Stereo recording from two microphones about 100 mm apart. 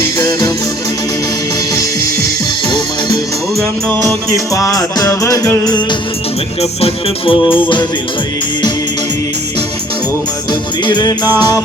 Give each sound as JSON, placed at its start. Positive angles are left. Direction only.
{"t": 0.2, "sound": "music", "side_deg": 45}
{"t": 4.5, "sound": "music", "side_deg": 35}
{"t": 6.6, "sound": "music", "side_deg": 90}
{"t": 10.5, "sound": "music", "side_deg": 45}